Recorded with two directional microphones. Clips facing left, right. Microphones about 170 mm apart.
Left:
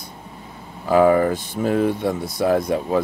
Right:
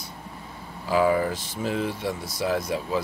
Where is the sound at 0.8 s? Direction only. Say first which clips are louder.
Left 7 dB; 55° left (ahead or behind).